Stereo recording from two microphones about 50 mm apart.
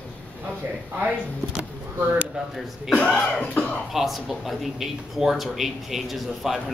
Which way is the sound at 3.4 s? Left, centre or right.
Left.